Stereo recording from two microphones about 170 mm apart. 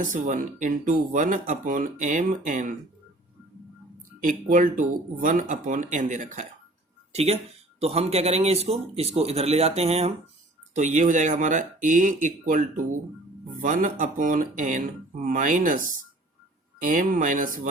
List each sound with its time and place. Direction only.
0.0 s speech: 50° right (ahead or behind)
4.2 s speech: 50° right (ahead or behind)